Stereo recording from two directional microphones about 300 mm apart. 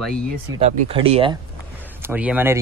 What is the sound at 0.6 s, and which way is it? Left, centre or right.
Speech, centre.